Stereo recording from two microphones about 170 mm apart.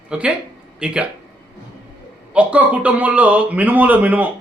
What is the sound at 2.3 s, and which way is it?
Speech, 5° right (ahead or behind).